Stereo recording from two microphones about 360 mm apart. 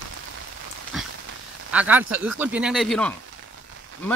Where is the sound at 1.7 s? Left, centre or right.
Centre.